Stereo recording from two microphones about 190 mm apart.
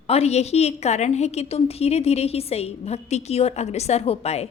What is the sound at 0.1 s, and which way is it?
A woman's voice, 35° left (ahead or behind).